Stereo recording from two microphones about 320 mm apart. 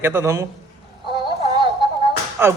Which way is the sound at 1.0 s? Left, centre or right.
Centre.